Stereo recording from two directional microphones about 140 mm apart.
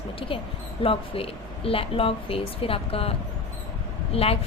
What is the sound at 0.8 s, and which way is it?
A woman's voice, 40° left (ahead or behind).